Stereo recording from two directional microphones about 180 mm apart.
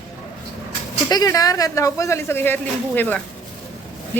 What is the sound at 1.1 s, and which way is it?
A woman's voice, 20° left (ahead or behind).